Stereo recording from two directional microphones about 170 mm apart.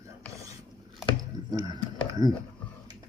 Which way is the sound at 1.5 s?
25° right (ahead or behind).